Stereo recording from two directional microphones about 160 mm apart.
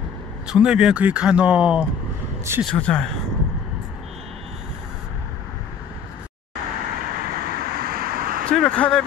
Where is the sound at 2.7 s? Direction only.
5° left (ahead or behind).